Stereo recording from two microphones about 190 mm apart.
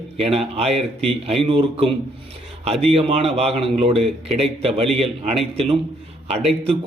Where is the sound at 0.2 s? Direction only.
30° right (ahead or behind).